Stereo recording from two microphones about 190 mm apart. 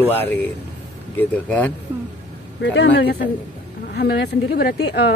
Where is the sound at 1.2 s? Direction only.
10° left (ahead or behind).